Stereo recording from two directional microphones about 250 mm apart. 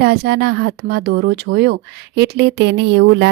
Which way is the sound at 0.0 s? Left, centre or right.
Right.